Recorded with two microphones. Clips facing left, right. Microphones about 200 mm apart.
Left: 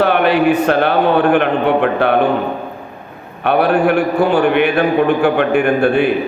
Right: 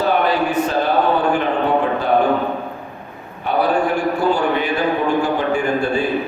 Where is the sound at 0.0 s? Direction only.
70° left (ahead or behind).